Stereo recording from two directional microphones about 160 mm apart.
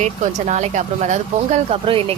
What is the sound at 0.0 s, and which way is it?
Speech, 45° right (ahead or behind).